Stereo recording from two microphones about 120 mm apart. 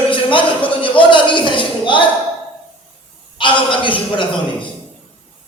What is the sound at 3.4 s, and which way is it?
Speech, 45° left (ahead or behind).